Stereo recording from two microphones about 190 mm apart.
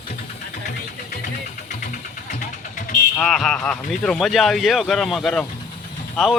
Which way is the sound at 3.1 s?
Centre (ahead or behind).